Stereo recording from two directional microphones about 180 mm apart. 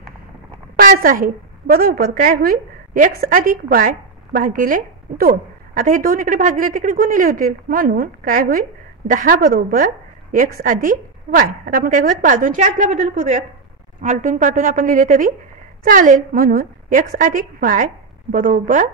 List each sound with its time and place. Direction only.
0.7 s a woman's voice: 50° right (ahead or behind)